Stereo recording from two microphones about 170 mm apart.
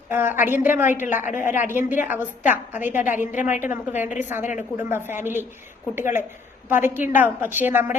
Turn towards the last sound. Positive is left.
turn(degrees=-10)  # may be behind; listen again after turning